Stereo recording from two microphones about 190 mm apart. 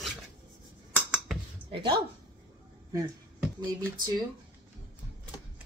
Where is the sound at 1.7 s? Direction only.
25° right (ahead or behind).